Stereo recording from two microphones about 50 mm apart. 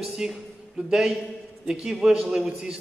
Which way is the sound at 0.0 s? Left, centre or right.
Centre.